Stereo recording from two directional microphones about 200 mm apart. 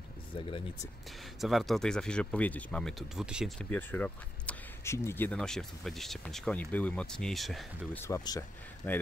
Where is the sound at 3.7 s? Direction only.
10° left (ahead or behind).